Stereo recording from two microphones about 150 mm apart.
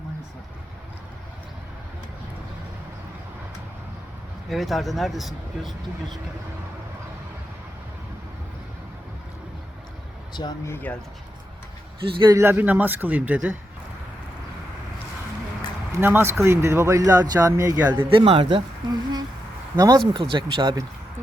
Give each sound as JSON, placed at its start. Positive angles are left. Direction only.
{"t": 4.4, "sound": "speech", "side_deg": 0}
{"t": 10.3, "sound": "speech", "side_deg": 30}
{"t": 10.7, "sound": "speech", "side_deg": 15}
{"t": 12.3, "sound": "a man's voice", "side_deg": -15}
{"t": 15.9, "sound": "speech", "side_deg": -15}
{"t": 18.0, "sound": "speech", "side_deg": -35}